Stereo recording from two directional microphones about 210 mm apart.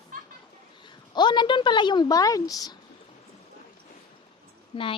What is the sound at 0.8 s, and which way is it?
A woman's voice, 20° left (ahead or behind).